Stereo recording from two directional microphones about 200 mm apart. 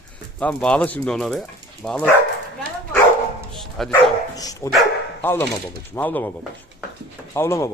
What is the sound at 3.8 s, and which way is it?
Speech, centre (ahead or behind).